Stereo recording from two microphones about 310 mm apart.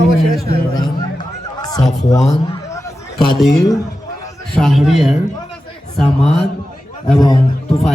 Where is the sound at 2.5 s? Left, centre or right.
Centre.